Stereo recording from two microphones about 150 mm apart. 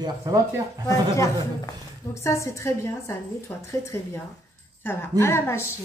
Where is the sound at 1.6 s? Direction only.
20° left (ahead or behind).